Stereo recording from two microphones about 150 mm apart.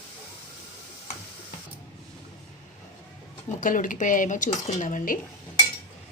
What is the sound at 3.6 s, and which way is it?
Speech, 60° left (ahead or behind).